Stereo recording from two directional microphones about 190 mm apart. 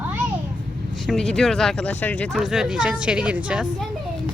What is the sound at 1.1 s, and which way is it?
Speech, 5° left (ahead or behind).